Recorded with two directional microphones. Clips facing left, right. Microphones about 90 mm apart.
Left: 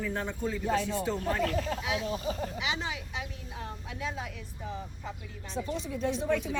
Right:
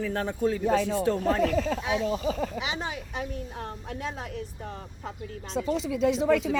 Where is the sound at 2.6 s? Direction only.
40° right (ahead or behind).